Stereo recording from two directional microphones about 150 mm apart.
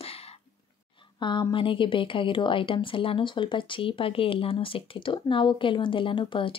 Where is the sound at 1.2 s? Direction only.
30° left (ahead or behind).